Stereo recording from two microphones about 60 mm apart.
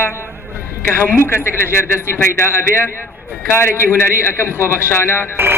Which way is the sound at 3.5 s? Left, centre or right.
Left.